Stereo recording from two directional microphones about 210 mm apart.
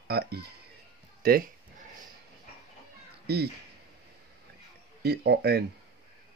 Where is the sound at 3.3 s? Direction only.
50° right (ahead or behind).